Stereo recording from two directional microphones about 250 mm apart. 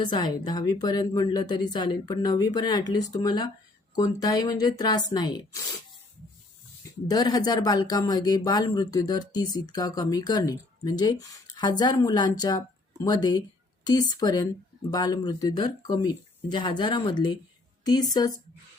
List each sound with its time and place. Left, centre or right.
0.0 s speech: centre
7.1 s speech: centre